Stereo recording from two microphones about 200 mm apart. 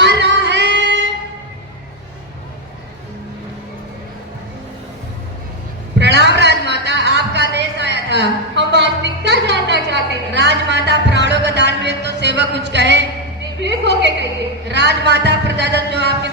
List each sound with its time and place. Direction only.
0.0 s singing: 60° right (ahead or behind)
6.0 s a sound: 60° right (ahead or behind)
14.7 s a man's voice: 60° right (ahead or behind)